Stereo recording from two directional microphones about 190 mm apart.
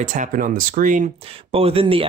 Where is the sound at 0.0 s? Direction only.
40° right (ahead or behind).